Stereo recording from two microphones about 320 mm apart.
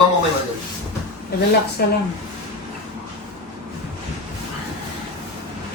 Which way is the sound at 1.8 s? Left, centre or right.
Left.